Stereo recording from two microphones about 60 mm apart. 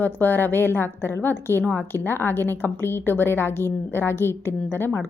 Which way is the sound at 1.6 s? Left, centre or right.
Left.